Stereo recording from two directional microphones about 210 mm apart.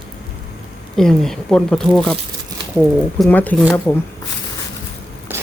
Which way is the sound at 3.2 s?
10° left (ahead or behind).